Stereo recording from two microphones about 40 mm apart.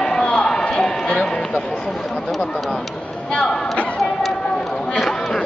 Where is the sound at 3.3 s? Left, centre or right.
Centre.